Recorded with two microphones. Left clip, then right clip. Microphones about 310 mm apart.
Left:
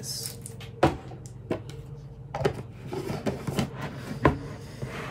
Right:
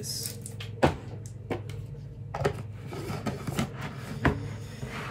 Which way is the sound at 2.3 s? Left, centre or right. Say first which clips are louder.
Left 2 dB; centre.